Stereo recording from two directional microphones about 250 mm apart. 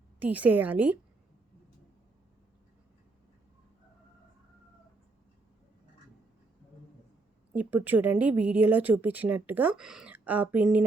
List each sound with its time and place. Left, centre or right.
0.2 s a woman's voice: centre
7.5 s a woman's voice: centre